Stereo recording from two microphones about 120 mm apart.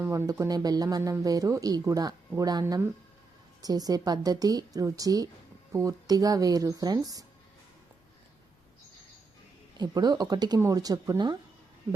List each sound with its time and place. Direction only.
0.0 s speech: 25° right (ahead or behind)
9.7 s speech: 35° right (ahead or behind)